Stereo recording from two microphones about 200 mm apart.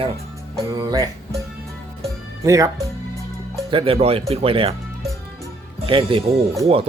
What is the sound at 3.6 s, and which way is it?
Speech, 25° right (ahead or behind).